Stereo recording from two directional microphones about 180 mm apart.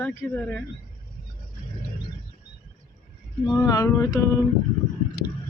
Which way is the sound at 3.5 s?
20° left (ahead or behind).